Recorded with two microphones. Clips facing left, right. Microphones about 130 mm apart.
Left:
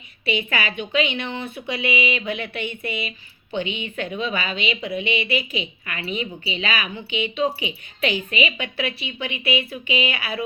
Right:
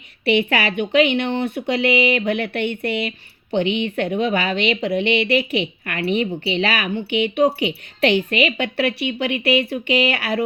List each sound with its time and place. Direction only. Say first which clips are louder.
0.3 s a woman's voice: right 7 dB; 65° right (ahead or behind)